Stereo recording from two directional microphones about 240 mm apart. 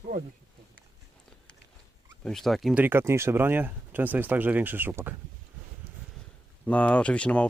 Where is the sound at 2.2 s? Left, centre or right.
Centre.